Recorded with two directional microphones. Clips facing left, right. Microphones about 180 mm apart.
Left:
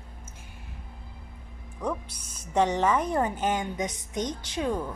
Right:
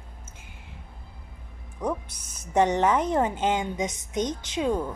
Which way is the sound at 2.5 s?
15° right (ahead or behind).